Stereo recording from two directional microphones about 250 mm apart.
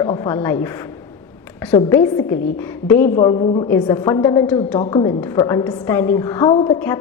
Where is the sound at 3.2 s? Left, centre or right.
Centre.